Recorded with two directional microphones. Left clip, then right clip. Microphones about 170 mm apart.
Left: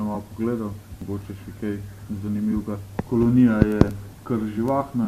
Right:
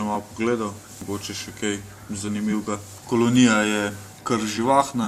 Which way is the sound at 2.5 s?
30° right (ahead or behind).